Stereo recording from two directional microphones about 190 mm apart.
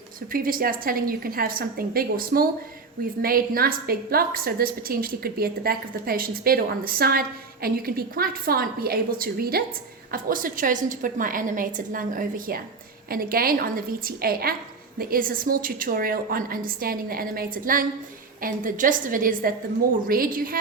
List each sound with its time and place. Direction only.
0.3 s a woman's voice: 50° right (ahead or behind)